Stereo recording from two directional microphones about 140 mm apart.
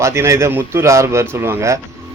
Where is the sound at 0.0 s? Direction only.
20° right (ahead or behind).